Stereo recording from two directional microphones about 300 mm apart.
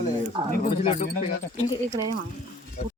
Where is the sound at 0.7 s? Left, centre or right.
Centre.